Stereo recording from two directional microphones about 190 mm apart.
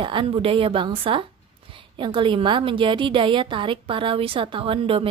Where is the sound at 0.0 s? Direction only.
25° right (ahead or behind).